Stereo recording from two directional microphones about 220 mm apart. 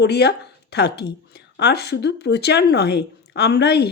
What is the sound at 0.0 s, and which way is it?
Speech, 50° left (ahead or behind).